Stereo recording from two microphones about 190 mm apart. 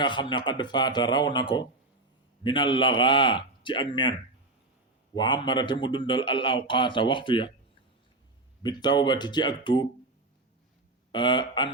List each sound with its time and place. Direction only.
0.0 s a man's voice: 25° left (ahead or behind)
5.1 s a man's voice: 25° left (ahead or behind)
8.6 s a man's voice: 20° left (ahead or behind)
11.1 s a man's voice: 25° left (ahead or behind)